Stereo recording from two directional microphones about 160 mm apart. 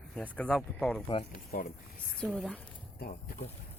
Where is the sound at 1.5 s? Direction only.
65° left (ahead or behind).